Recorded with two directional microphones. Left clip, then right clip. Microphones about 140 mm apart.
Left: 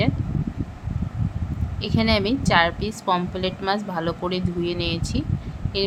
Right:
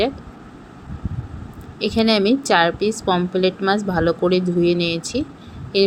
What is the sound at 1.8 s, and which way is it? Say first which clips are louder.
Speech: right 5 dB; 15° right (ahead or behind).